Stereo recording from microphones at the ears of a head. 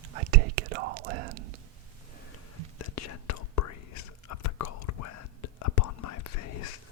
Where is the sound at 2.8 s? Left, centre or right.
Left.